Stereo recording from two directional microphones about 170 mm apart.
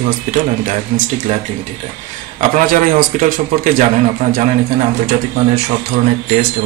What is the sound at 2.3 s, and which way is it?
Speech, 55° right (ahead or behind).